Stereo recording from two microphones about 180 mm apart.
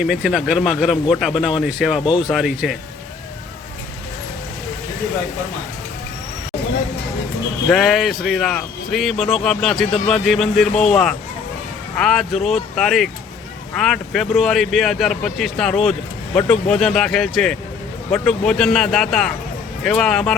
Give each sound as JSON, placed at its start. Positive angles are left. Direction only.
{"t": 0.0, "sound": "speech", "side_deg": -5}
{"t": 2.0, "sound": "speech", "side_deg": 25}
{"t": 2.3, "sound": "speech", "side_deg": 0}
{"t": 7.7, "sound": "speech", "side_deg": 0}